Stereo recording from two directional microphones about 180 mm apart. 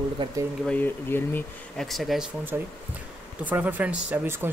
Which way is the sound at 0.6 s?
10° left (ahead or behind).